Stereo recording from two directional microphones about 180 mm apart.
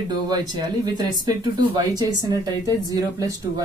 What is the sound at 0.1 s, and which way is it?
Speech, 20° right (ahead or behind).